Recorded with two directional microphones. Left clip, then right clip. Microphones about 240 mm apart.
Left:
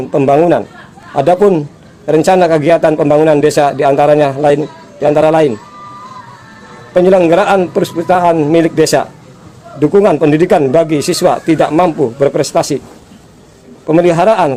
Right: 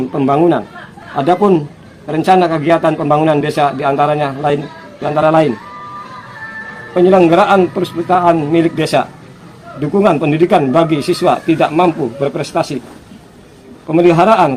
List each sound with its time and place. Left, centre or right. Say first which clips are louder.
1.1 s speech: left 3 dB; left
6.9 s speech: left 1 dB; left
13.8 s speech: left 1 dB; left